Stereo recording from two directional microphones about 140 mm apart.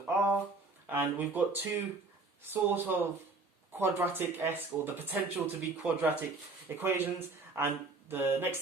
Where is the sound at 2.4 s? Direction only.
15° right (ahead or behind).